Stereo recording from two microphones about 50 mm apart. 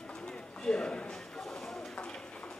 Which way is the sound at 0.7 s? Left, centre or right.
Centre.